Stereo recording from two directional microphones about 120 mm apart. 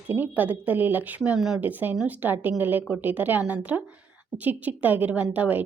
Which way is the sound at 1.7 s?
15° right (ahead or behind).